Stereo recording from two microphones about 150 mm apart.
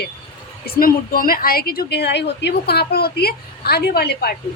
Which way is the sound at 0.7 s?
75° left (ahead or behind).